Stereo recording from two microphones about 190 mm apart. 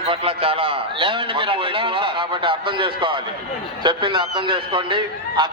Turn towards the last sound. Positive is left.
turn(degrees=-25)  # may be behind; listen again after turning